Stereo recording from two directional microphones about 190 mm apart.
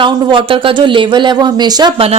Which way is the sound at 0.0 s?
25° right (ahead or behind).